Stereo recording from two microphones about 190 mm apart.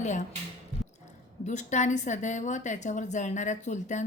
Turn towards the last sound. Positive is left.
turn(degrees=40)  # may be behind; listen again after turning